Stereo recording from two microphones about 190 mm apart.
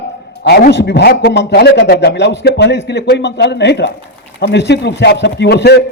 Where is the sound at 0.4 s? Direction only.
60° left (ahead or behind).